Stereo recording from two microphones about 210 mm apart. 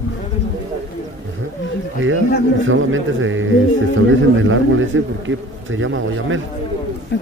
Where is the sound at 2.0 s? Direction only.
65° right (ahead or behind).